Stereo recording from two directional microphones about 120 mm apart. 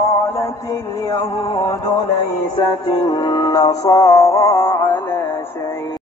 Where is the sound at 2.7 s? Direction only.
35° left (ahead or behind); by 5.9 s 20° left (ahead or behind).